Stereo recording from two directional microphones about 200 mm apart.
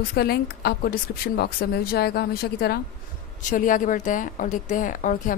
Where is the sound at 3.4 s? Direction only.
40° left (ahead or behind).